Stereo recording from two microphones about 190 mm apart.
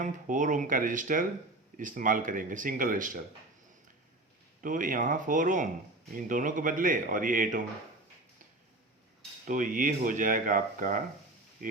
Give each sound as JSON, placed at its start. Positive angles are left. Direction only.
{"t": 0.0, "sound": "speech", "side_deg": -40}
{"t": 4.6, "sound": "speech", "side_deg": -45}
{"t": 9.5, "sound": "speech", "side_deg": -45}